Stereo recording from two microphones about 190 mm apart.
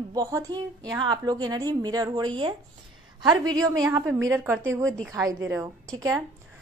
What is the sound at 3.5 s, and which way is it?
A woman's voice, 20° right (ahead or behind).